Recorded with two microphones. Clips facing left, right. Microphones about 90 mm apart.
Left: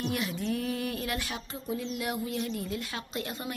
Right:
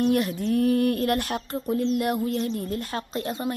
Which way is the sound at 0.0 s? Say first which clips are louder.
Right 9 dB; 45° right (ahead or behind).